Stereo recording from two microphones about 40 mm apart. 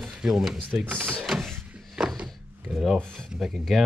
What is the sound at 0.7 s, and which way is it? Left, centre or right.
Speech, right.